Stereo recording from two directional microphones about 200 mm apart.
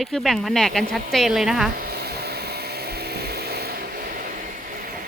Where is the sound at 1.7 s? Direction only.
50° right (ahead or behind).